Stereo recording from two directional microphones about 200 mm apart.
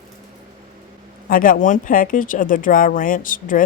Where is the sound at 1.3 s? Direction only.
45° left (ahead or behind).